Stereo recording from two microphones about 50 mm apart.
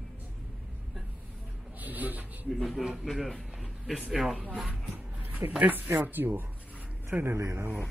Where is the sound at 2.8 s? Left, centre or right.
Centre.